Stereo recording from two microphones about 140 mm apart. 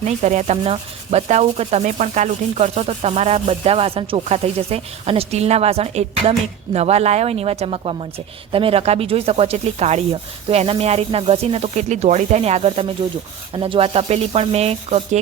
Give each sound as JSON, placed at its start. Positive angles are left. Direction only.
{"t": 0.0, "sound": "speech", "side_deg": -55}